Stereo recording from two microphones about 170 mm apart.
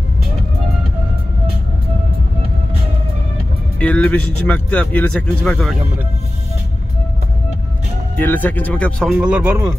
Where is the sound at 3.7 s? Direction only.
5° left (ahead or behind).